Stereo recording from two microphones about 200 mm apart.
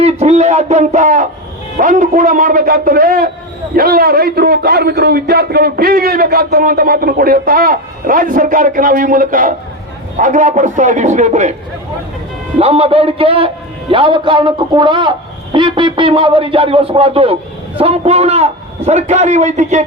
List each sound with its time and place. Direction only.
0.0 s a man's voice: 35° right (ahead or behind)
12.5 s a man's voice: 30° right (ahead or behind)